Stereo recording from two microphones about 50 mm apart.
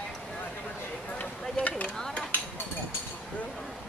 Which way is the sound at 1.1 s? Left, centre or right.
Left.